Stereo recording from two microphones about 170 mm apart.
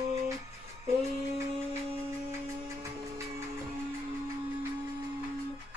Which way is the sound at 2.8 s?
15° right (ahead or behind).